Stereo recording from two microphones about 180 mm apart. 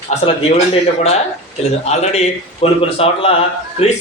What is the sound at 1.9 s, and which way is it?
A man's voice, 35° left (ahead or behind).